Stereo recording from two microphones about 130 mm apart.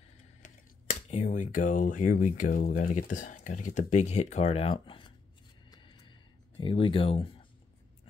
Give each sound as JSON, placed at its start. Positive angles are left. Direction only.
{"t": 0.4, "sound": "speech", "side_deg": 70}
{"t": 5.7, "sound": "a sound", "side_deg": 35}
{"t": 6.6, "sound": "speech", "side_deg": 45}